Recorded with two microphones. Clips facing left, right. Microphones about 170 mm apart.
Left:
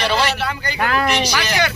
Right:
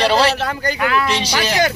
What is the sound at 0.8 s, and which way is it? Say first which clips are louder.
Speech: even; 40° left (ahead or behind).